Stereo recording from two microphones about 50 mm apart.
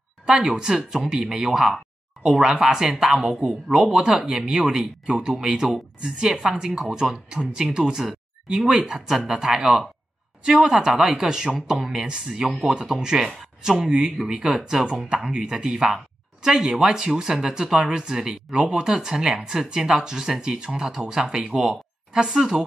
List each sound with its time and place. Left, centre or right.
0.3 s speech: centre